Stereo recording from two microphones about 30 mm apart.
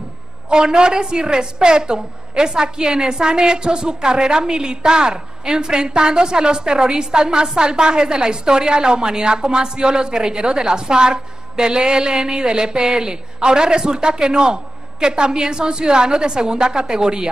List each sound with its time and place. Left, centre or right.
0.5 s a woman's voice: right